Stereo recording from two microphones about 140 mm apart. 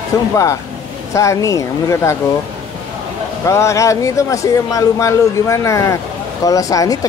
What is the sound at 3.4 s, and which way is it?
Speech, 20° left (ahead or behind).